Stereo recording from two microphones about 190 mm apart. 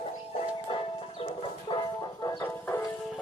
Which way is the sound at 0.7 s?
25° left (ahead or behind).